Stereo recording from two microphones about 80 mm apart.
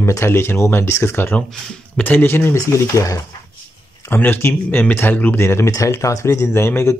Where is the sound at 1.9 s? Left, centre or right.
Left.